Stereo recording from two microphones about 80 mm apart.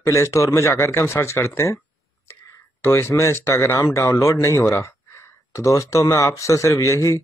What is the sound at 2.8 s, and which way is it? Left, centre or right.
Speech, left.